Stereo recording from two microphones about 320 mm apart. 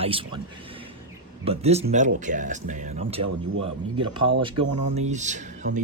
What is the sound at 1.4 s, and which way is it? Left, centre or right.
Speech, centre.